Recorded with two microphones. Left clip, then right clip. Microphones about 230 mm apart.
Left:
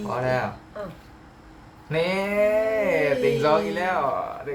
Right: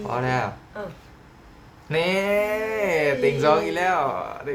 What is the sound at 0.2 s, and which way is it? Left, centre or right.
Speech, right.